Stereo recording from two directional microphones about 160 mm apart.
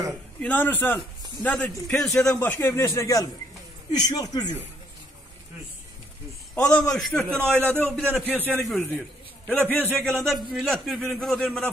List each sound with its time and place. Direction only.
0.4 s a man's voice: 10° left (ahead or behind)
6.5 s a man's voice: 5° left (ahead or behind)
9.9 s a man's voice: centre (ahead or behind)